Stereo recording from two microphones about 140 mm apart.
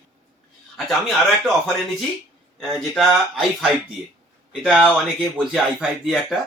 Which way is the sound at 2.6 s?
Centre (ahead or behind).